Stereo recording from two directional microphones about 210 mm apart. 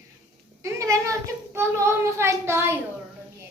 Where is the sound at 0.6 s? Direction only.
15° right (ahead or behind).